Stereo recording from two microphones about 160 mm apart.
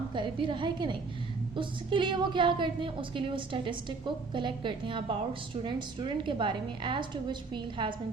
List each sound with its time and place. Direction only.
0.1 s a woman's voice: 30° right (ahead or behind)